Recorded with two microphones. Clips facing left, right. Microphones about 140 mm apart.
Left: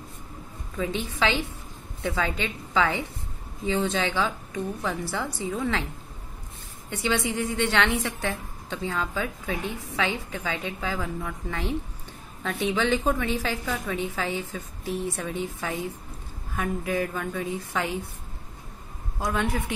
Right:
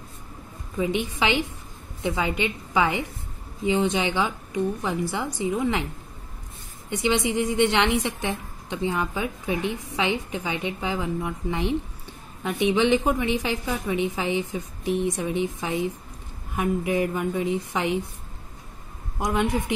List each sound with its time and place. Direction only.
0.7 s a woman's voice: 15° right (ahead or behind)
6.9 s a woman's voice: 20° right (ahead or behind)
19.1 s a woman's voice: 15° right (ahead or behind)